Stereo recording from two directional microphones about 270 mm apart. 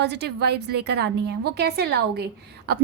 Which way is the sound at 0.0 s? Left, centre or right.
Right.